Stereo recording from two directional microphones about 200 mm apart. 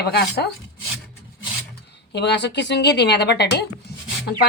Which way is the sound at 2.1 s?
60° left (ahead or behind).